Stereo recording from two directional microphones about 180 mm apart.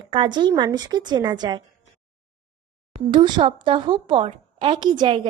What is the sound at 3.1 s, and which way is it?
A woman's voice, 25° right (ahead or behind).